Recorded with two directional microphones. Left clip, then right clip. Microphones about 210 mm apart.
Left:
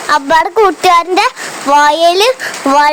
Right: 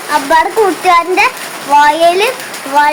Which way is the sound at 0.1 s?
40° left (ahead or behind).